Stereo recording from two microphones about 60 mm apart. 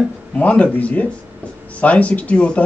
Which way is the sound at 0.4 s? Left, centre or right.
Left.